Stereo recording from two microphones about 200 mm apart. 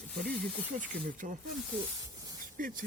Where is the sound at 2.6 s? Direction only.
45° right (ahead or behind).